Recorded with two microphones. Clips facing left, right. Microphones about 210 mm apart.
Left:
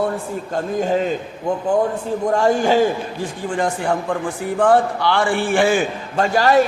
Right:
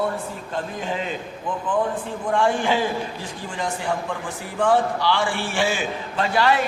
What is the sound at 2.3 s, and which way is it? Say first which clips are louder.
Speech: left 4 dB; 40° left (ahead or behind).